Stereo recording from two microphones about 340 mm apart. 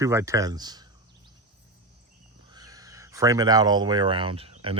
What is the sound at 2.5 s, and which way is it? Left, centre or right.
Speech, centre.